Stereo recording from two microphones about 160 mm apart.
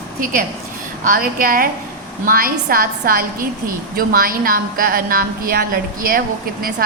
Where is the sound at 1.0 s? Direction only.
60° right (ahead or behind).